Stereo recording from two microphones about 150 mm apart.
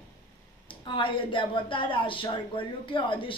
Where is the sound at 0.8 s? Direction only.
35° left (ahead or behind).